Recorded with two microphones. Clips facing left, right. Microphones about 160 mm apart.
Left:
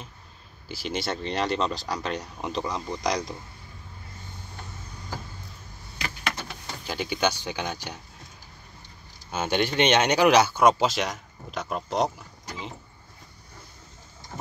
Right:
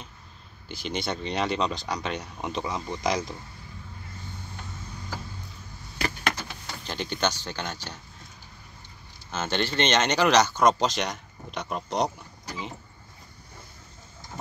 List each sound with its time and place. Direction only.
0.7 s speech: 5° left (ahead or behind)
5.9 s vehicle: 45° right (ahead or behind)
6.8 s speech: 10° left (ahead or behind)
9.3 s speech: 10° left (ahead or behind)